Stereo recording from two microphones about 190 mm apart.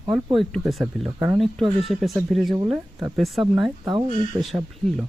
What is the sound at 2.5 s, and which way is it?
Speech, 25° right (ahead or behind).